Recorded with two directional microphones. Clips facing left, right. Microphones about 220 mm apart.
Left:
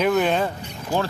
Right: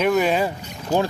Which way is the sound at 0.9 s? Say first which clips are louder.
Right 3 dB; 20° right (ahead or behind).